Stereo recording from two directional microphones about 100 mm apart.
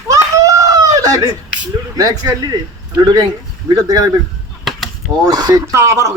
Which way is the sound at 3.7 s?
40° right (ahead or behind).